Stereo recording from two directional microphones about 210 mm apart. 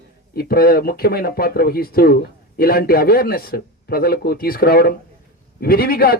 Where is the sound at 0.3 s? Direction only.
45° left (ahead or behind).